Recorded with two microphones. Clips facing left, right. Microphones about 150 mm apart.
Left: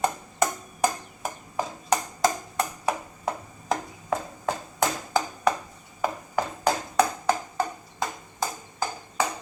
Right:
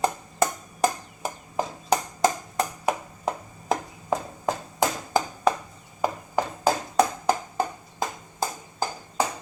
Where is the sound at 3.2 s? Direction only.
20° right (ahead or behind).